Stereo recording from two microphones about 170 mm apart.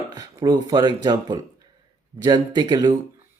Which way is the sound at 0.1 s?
20° right (ahead or behind).